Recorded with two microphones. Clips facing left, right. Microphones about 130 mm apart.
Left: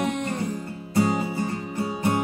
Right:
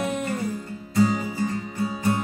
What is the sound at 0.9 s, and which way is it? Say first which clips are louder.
Music: right 1 dB; 20° left (ahead or behind).